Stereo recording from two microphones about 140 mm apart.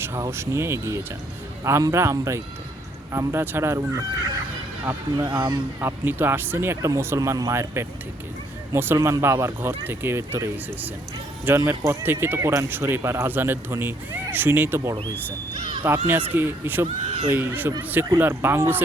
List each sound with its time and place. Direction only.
0.0 s speech: 20° right (ahead or behind)
5.1 s speech: 30° right (ahead or behind)
5.8 s speech: 15° right (ahead or behind)
16.8 s speech: 45° right (ahead or behind)
17.3 s speech: 15° right (ahead or behind)